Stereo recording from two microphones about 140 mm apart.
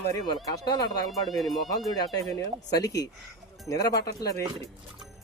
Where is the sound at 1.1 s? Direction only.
Centre (ahead or behind).